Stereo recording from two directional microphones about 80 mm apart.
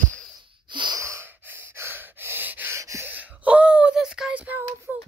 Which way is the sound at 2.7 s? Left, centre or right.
Right.